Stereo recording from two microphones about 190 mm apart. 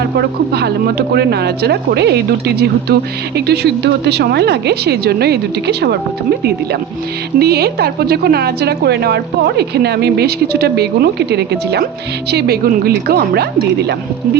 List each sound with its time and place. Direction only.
0.2 s a woman's voice: 60° right (ahead or behind)
7.3 s a woman's voice: 55° right (ahead or behind)